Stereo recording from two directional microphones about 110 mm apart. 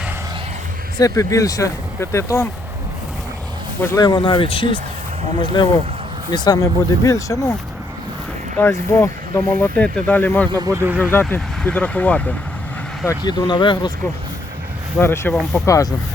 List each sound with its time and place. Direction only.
0.9 s speech: 30° left (ahead or behind)
4.0 s speech: 45° left (ahead or behind)
5.4 s speech: 40° left (ahead or behind)
8.5 s speech: 25° left (ahead or behind)
9.7 s speech: 10° left (ahead or behind)
10.5 s speech: 35° right (ahead or behind)
10.8 s speech: 15° right (ahead or behind)
11.1 s speech: 15° left (ahead or behind)
13.2 s speech: 45° left (ahead or behind)
14.9 s speech: 20° left (ahead or behind)
15.3 s speech: 5° left (ahead or behind)
15.6 s speech: 30° left (ahead or behind)